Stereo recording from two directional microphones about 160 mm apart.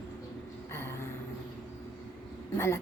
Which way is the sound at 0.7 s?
15° left (ahead or behind).